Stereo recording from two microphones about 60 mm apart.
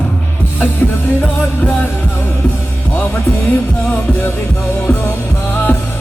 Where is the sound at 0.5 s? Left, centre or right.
Left.